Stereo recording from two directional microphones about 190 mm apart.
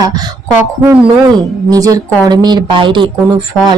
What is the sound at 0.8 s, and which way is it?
Speech, 10° right (ahead or behind).